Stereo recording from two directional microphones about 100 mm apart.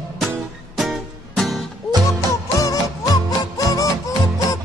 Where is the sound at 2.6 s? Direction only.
35° left (ahead or behind).